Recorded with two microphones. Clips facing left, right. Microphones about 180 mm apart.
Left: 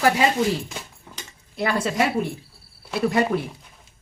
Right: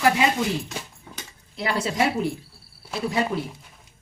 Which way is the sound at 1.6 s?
50° left (ahead or behind).